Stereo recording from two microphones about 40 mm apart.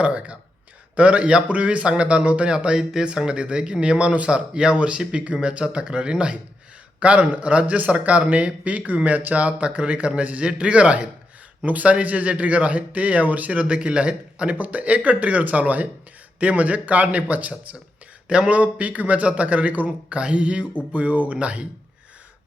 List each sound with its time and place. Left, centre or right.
0.0 s speech: right
9.0 s speech: right
9.3 s speech: right
13.7 s speech: right
18.3 s speech: right
20.1 s speech: right